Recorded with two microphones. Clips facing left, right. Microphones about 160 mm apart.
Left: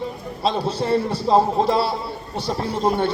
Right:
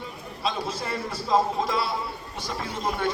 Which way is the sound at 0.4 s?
30° left (ahead or behind).